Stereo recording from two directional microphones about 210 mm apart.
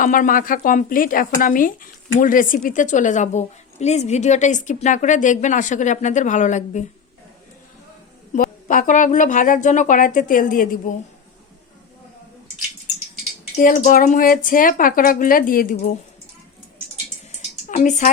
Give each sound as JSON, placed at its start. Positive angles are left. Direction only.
{"t": 0.0, "sound": "speech", "side_deg": 40}
{"t": 8.3, "sound": "speech", "side_deg": 40}
{"t": 13.6, "sound": "speech", "side_deg": 40}
{"t": 17.7, "sound": "a woman's voice", "side_deg": 35}